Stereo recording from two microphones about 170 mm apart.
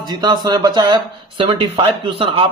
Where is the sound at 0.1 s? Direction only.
25° right (ahead or behind).